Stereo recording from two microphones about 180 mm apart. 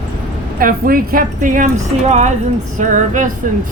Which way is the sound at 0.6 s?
50° right (ahead or behind).